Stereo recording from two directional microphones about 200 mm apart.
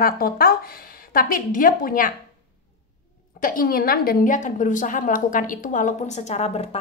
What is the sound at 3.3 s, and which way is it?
A woman's voice, 45° left (ahead or behind).